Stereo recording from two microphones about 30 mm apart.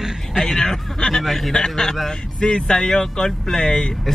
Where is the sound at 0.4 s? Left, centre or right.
Centre.